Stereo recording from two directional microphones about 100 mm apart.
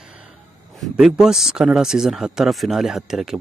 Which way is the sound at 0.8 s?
5° right (ahead or behind).